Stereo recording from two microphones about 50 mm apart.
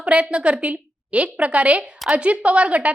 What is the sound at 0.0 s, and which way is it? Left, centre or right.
A woman's voice, right.